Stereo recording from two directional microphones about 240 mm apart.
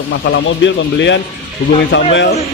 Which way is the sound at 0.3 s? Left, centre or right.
Left.